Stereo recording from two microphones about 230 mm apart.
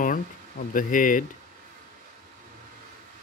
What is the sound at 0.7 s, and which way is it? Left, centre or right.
Speech, left.